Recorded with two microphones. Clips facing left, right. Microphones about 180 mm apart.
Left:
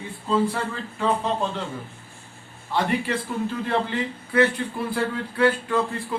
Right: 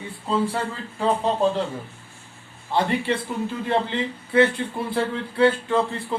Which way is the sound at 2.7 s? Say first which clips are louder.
Right 2 dB; 30° right (ahead or behind).